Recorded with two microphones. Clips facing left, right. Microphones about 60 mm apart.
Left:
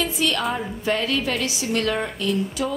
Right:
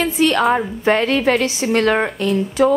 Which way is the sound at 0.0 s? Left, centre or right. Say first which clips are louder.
Right 7 dB; right.